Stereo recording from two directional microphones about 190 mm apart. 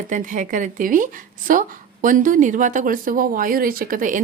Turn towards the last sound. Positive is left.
turn(degrees=-45)  # may be behind; listen again after turning